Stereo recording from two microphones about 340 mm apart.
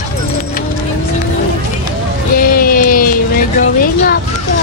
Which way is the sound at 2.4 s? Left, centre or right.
Left.